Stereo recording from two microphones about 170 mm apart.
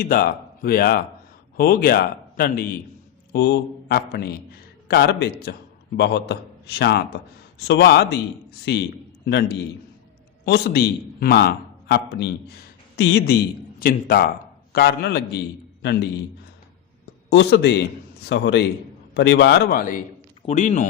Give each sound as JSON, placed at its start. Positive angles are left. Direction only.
{"t": 0.0, "sound": "a man's voice", "side_deg": 55}
{"t": 8.7, "sound": "a man's voice", "side_deg": 90}
{"t": 9.2, "sound": "a man's voice", "side_deg": 75}
{"t": 17.2, "sound": "a man's voice", "side_deg": 85}
{"t": 20.5, "sound": "speech", "side_deg": 45}